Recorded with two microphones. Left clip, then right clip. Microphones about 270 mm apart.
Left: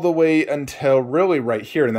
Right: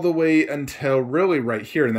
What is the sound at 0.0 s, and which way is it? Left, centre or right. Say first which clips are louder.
Speech: left 2 dB; centre.